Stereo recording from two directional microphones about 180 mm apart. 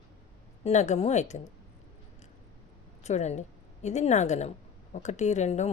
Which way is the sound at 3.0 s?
40° left (ahead or behind).